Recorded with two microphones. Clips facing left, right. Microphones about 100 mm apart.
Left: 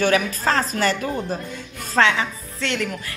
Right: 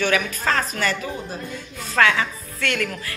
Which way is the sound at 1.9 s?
20° left (ahead or behind).